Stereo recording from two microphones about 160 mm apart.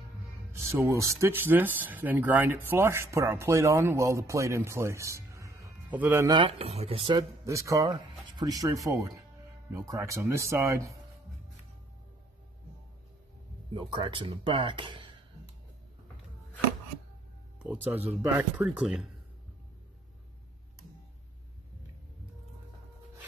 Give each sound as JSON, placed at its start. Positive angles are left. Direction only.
{"t": 0.7, "sound": "speech", "side_deg": -20}
{"t": 6.2, "sound": "speech", "side_deg": -30}
{"t": 7.4, "sound": "speech", "side_deg": -20}
{"t": 13.7, "sound": "speech", "side_deg": -30}
{"t": 17.6, "sound": "speech", "side_deg": -10}